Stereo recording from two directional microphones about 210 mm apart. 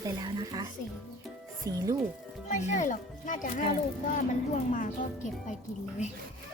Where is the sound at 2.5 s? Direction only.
35° left (ahead or behind).